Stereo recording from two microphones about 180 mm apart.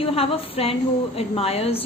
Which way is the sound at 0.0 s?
30° left (ahead or behind).